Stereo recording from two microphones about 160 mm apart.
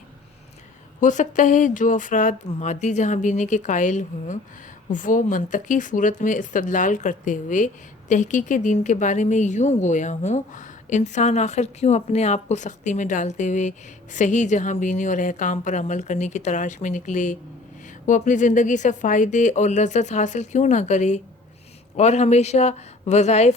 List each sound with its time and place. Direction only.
1.0 s speech: 50° left (ahead or behind)